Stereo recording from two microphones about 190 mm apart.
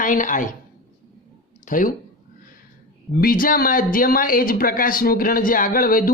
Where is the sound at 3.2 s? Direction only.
45° left (ahead or behind).